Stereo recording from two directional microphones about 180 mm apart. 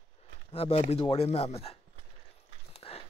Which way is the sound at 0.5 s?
35° left (ahead or behind).